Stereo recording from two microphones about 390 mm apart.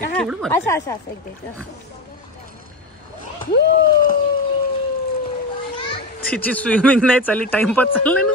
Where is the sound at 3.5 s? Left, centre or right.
Left.